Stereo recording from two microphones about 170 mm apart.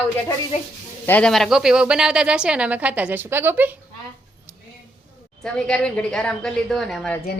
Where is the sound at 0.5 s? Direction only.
40° left (ahead or behind).